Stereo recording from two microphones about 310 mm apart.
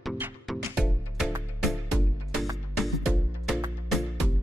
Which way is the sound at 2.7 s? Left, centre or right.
Centre.